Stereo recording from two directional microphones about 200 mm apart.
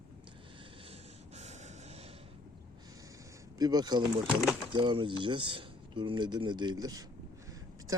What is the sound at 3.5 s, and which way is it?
Speech, 20° right (ahead or behind).